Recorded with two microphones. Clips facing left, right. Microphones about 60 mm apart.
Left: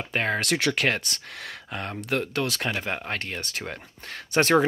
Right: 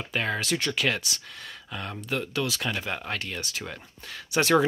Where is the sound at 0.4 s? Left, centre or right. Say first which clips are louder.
Left 4 dB; left.